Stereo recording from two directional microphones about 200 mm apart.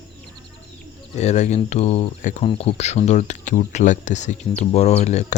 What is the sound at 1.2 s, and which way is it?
Speech, 35° left (ahead or behind).